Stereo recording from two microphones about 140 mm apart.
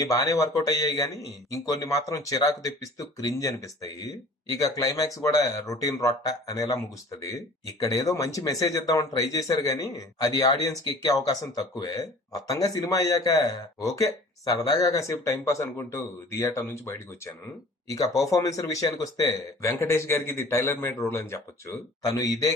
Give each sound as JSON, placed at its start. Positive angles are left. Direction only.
{"t": 0.0, "sound": "a man's voice", "side_deg": 25}